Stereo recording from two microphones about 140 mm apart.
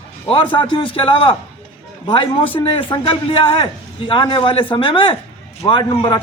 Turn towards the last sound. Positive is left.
turn(degrees=35)  # may be behind; listen again after turning